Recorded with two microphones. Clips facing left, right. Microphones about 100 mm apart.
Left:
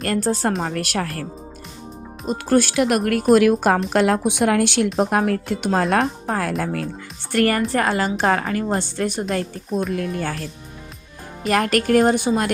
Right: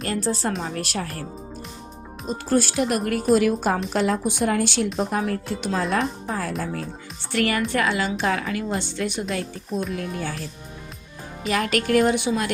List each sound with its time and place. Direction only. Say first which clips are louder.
0.0 s a woman's voice: left 4 dB; 55° left (ahead or behind); by 1.2 s 75° left (ahead or behind)
2.2 s speech: left 4 dB; 65° left (ahead or behind)
7.3 s a woman's voice: left 4 dB; 45° left (ahead or behind)
11.4 s a woman's voice: left 4 dB; 45° left (ahead or behind)